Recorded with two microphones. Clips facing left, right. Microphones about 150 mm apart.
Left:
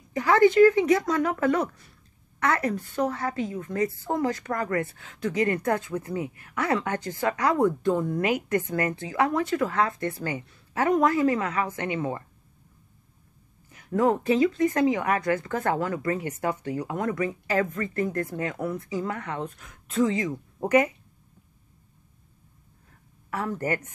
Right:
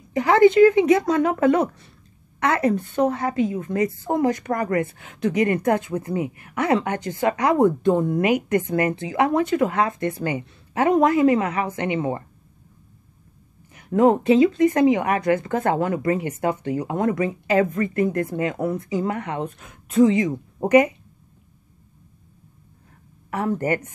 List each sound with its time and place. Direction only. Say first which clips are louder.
0.1 s speech: right 4 dB; 20° right (ahead or behind)
13.7 s speech: right 6 dB; 20° right (ahead or behind)
23.3 s speech: right 5 dB; 20° right (ahead or behind)